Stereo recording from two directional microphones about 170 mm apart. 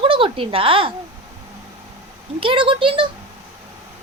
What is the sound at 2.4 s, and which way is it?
Speech, 30° right (ahead or behind).